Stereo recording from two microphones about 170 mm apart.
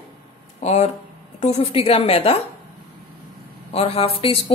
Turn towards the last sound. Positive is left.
turn(degrees=30)  # may be behind; listen again after turning